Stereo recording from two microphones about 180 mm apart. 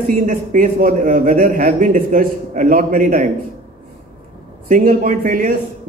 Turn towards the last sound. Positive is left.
turn(degrees=-50)  # may be behind; listen again after turning